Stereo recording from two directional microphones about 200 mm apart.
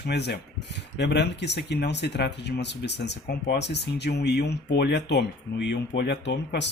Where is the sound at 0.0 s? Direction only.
55° left (ahead or behind).